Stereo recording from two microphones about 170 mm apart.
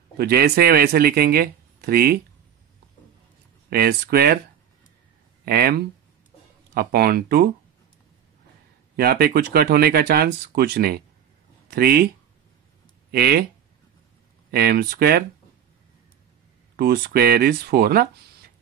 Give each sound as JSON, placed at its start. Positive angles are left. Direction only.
{"t": 0.2, "sound": "speech", "side_deg": -65}
{"t": 3.7, "sound": "speech", "side_deg": -65}
{"t": 5.4, "sound": "speech", "side_deg": -65}
{"t": 8.9, "sound": "speech", "side_deg": -65}
{"t": 13.1, "sound": "speech", "side_deg": -65}
{"t": 14.5, "sound": "speech", "side_deg": -65}
{"t": 16.7, "sound": "speech", "side_deg": -60}